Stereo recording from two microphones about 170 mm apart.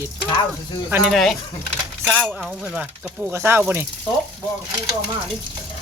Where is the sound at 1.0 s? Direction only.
Centre (ahead or behind).